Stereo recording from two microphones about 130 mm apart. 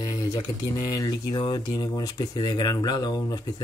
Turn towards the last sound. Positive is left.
turn(degrees=30)  # may be behind; listen again after turning